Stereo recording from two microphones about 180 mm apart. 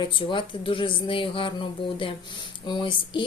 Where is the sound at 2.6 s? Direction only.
25° left (ahead or behind).